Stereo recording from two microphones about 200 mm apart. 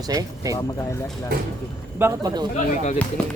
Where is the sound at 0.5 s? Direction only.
15° left (ahead or behind).